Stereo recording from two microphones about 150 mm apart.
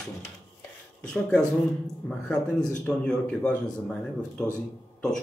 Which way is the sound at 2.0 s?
5° left (ahead or behind).